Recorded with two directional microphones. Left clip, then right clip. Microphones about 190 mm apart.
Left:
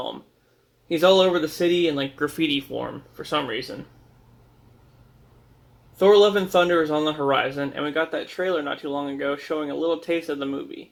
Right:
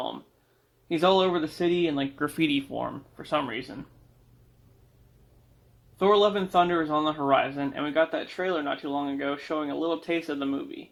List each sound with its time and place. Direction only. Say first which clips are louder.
0.9 s speech: left 5 dB; 20° right (ahead or behind)
2.8 s speech: left 2 dB; 25° right (ahead or behind)
6.0 s speech: left 6 dB; 25° right (ahead or behind)